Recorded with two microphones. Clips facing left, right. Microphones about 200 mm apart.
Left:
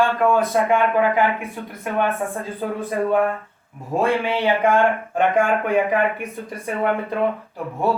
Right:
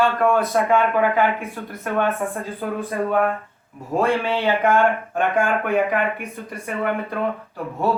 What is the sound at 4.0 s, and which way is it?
Speech, 15° left (ahead or behind).